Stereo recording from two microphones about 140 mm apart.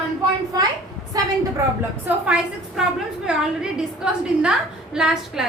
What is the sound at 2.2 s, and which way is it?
A woman's voice, 10° right (ahead or behind).